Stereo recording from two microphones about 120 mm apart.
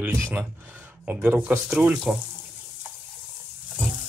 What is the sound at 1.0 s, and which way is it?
Speech, 15° right (ahead or behind).